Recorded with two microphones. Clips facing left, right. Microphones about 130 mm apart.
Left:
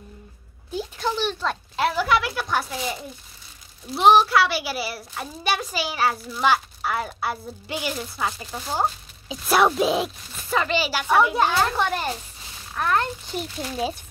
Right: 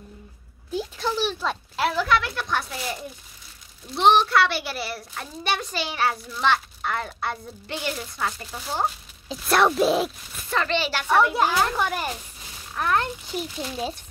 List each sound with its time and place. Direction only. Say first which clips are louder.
0.7 s a child's voice: even; centre (ahead or behind)